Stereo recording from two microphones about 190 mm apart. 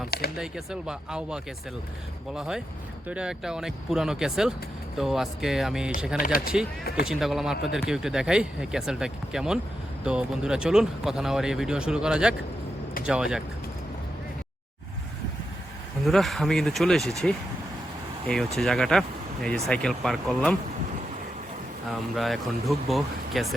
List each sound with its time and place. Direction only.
0.3 s speech: 5° right (ahead or behind)
6.2 s speech: 50° left (ahead or behind)
7.0 s speech: centre (ahead or behind)
16.0 s speech: centre (ahead or behind)
18.5 s speech: centre (ahead or behind)
22.1 s speech: centre (ahead or behind)